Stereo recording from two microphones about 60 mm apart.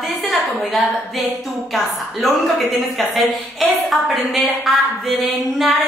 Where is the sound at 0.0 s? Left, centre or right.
Centre.